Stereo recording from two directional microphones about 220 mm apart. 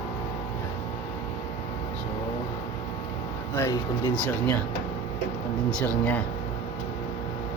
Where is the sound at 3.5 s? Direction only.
15° left (ahead or behind).